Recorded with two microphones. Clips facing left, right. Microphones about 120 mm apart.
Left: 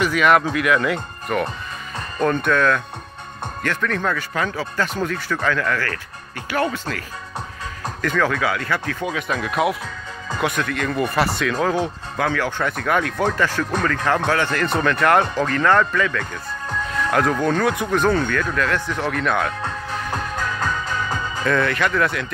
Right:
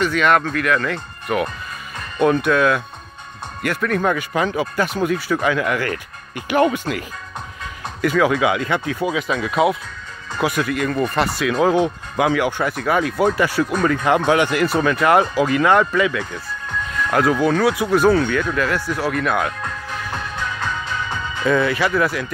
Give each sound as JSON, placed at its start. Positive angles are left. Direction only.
{"t": 0.0, "sound": "speech", "side_deg": 5}
{"t": 1.3, "sound": "speech", "side_deg": -5}
{"t": 9.0, "sound": "speech", "side_deg": -5}
{"t": 11.4, "sound": "speech", "side_deg": -15}
{"t": 20.3, "sound": "music", "side_deg": 40}
{"t": 21.5, "sound": "speech", "side_deg": -5}